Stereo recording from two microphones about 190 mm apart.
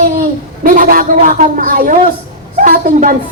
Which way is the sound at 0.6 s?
45° right (ahead or behind).